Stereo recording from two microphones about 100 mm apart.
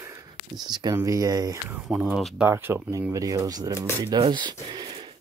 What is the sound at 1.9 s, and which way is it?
Speech, 15° right (ahead or behind).